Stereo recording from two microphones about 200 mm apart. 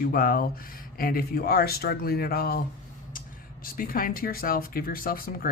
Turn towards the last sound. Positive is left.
turn(degrees=45)  # may be behind; listen again after turning